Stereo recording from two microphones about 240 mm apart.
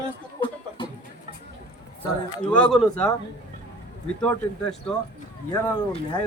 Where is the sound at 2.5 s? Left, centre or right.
Centre.